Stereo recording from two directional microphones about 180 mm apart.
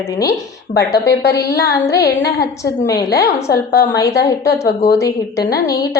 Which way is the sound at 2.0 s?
60° left (ahead or behind).